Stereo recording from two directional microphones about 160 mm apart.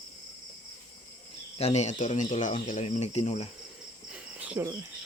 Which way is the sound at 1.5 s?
45° left (ahead or behind).